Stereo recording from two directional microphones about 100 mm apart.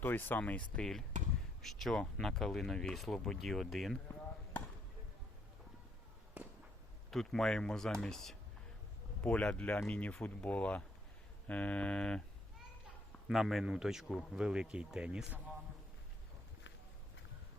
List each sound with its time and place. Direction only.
0.0 s speech: 20° left (ahead or behind); by 3.9 s centre (ahead or behind)
6.4 s a sound: 15° right (ahead or behind)
7.1 s speech: 5° left (ahead or behind)
13.2 s speech: centre (ahead or behind)